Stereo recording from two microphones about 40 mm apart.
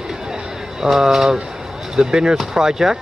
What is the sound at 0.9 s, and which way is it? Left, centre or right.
Speech, centre.